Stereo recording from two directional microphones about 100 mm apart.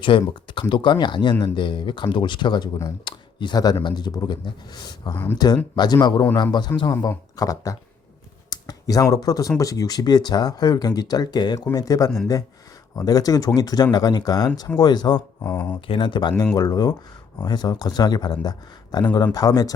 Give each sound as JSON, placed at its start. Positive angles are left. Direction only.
{"t": 0.0, "sound": "speech", "side_deg": 55}
{"t": 5.1, "sound": "speech", "side_deg": 20}
{"t": 5.7, "sound": "speech", "side_deg": 45}
{"t": 15.4, "sound": "speech", "side_deg": 20}
{"t": 15.9, "sound": "speech", "side_deg": 55}
{"t": 16.6, "sound": "speech", "side_deg": 40}